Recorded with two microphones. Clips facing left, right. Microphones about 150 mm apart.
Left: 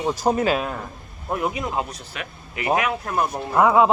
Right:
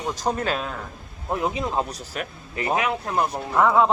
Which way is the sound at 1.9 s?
40° right (ahead or behind).